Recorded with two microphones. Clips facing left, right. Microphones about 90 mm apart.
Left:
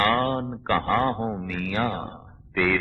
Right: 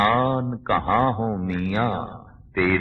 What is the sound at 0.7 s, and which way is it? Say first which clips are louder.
A man's voice: right 2 dB; 10° right (ahead or behind).